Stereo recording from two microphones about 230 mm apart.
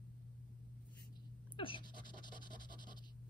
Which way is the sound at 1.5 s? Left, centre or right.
Left.